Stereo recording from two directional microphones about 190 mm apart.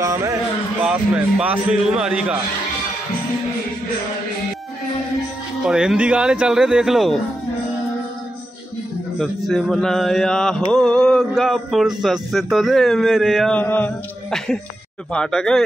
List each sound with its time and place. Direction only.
0.0 s a man's voice: 15° right (ahead or behind)
0.8 s mantra: 5° right (ahead or behind)
5.6 s mantra: 5° right (ahead or behind)
9.5 s mantra: centre (ahead or behind)